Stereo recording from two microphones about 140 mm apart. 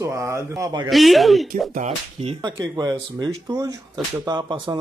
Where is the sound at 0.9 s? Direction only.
Centre (ahead or behind).